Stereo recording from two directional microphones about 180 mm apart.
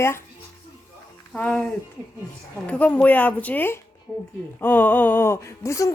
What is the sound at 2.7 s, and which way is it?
Speech, 5° left (ahead or behind).